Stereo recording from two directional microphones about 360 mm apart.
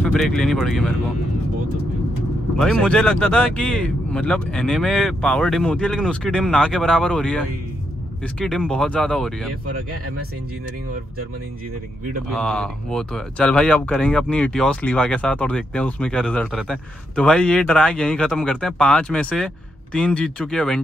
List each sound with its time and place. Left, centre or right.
0.0 s speech: centre
2.6 s speech: centre
9.7 s speech: right
12.4 s speech: centre